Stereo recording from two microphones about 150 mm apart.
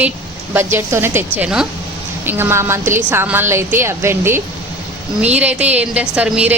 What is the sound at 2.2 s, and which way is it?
A woman's voice, 15° right (ahead or behind).